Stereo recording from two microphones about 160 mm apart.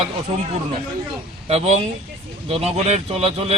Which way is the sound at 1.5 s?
45° right (ahead or behind).